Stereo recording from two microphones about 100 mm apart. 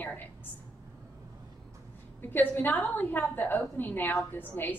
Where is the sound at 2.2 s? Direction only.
20° left (ahead or behind).